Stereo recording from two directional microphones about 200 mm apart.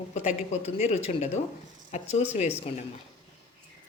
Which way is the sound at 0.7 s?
35° left (ahead or behind).